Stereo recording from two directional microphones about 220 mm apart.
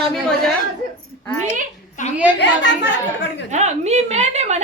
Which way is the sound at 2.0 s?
35° left (ahead or behind).